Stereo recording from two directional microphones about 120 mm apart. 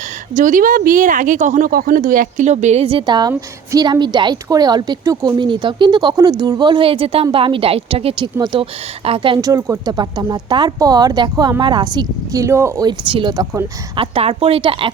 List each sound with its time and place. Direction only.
0.3 s speech: 90° right; by 2.8 s 75° right (ahead or behind)
2.8 s a woman's voice: 45° right (ahead or behind)
5.5 s a woman's voice: 40° right (ahead or behind)
9.4 s a woman's voice: 30° right (ahead or behind)
12.8 s a woman's voice: 40° right (ahead or behind)